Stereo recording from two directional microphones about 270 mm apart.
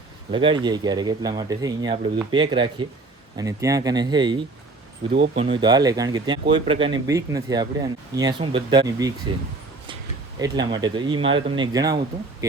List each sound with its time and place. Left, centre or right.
0.3 s speech: centre
5.1 s speech: right
5.4 s speech: centre
10.3 s speech: centre